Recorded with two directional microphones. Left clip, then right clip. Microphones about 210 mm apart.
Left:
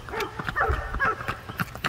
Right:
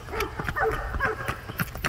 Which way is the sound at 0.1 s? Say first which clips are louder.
Even; 5° right (ahead or behind).